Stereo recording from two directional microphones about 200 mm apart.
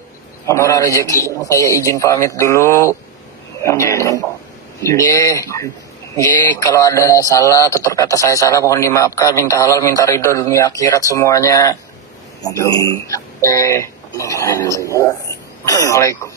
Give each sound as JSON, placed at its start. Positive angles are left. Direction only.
{"t": 0.5, "sound": "speech", "side_deg": 15}